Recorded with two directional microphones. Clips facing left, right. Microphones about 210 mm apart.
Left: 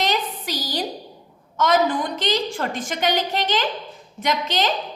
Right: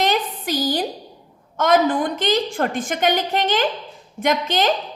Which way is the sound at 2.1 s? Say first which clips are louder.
Right 3 dB; 50° right (ahead or behind).